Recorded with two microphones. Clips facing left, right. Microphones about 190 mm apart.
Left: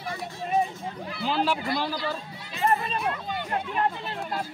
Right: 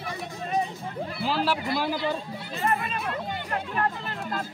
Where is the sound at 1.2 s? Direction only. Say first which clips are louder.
Left 1 dB; centre (ahead or behind).